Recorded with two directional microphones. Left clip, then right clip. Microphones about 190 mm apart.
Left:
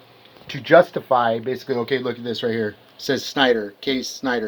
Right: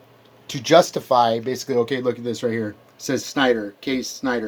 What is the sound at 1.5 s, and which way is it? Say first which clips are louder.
Speech: right 1 dB; 5° right (ahead or behind).